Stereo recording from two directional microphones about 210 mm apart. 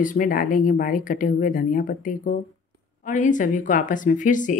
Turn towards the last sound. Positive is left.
turn(degrees=35)  # may be behind; listen again after turning